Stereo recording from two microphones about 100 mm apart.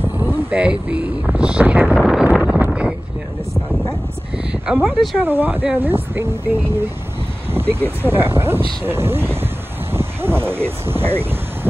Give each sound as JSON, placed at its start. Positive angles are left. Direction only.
{"t": 0.2, "sound": "speech", "side_deg": -15}
{"t": 2.0, "sound": "a sound", "side_deg": 0}
{"t": 2.3, "sound": "wind noise", "side_deg": 0}
{"t": 2.6, "sound": "wind noise", "side_deg": -10}
{"t": 4.7, "sound": "speech", "side_deg": 5}
{"t": 5.2, "sound": "speech", "side_deg": -20}
{"t": 9.9, "sound": "a sound", "side_deg": -25}